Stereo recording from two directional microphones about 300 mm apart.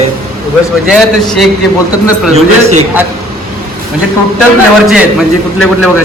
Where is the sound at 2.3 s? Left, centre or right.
Right.